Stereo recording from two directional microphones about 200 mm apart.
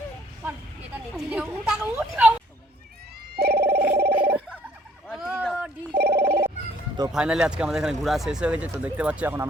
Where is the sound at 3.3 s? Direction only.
50° right (ahead or behind).